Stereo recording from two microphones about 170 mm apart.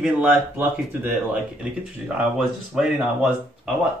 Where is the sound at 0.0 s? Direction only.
10° right (ahead or behind).